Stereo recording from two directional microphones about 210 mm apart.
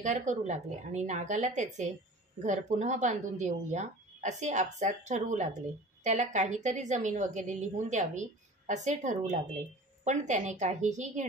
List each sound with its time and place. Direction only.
0.0 s a woman's voice: 35° right (ahead or behind)